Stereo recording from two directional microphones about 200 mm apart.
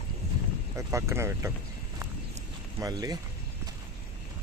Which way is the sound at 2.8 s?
15° right (ahead or behind).